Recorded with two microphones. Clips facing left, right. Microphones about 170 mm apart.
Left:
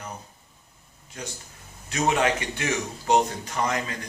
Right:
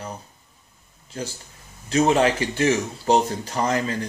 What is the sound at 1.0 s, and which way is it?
Speech, 30° right (ahead or behind).